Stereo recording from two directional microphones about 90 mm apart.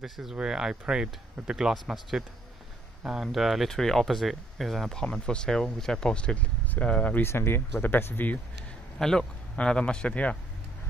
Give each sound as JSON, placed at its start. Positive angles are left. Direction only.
{"t": 0.0, "sound": "speech", "side_deg": -5}
{"t": 8.9, "sound": "speech", "side_deg": 5}